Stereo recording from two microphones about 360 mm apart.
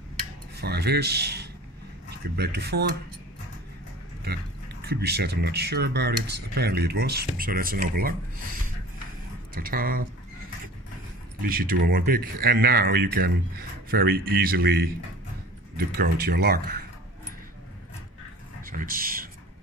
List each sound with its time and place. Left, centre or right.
0.6 s speech: right
4.2 s speech: right
9.5 s speech: right
11.4 s speech: right
18.6 s speech: right